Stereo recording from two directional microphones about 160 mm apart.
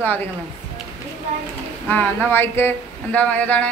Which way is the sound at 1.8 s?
10° left (ahead or behind).